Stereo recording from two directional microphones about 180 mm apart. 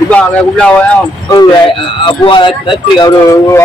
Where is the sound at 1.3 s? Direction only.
25° left (ahead or behind).